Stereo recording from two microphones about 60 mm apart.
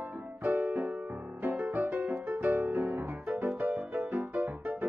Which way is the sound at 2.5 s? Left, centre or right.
Right.